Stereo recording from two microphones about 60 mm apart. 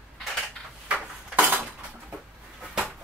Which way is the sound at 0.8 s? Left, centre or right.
Right.